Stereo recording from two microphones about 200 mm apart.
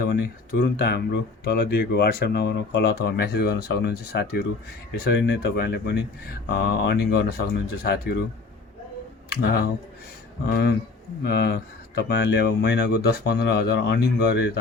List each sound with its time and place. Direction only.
0.0 s speech: 55° left (ahead or behind)
9.3 s speech: 55° left (ahead or behind)